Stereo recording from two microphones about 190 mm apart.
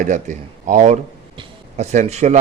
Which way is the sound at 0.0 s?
40° right (ahead or behind).